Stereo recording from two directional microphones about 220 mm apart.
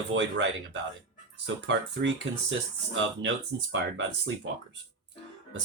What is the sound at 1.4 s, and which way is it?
Speech, 55° right (ahead or behind).